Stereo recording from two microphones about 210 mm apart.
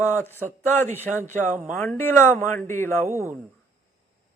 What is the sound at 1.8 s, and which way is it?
Speech, 10° left (ahead or behind).